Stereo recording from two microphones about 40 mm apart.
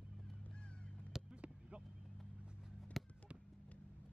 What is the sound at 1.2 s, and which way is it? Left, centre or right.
Vehicle, right.